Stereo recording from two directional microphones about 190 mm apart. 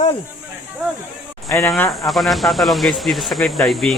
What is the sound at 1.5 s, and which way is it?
Speech, 10° left (ahead or behind).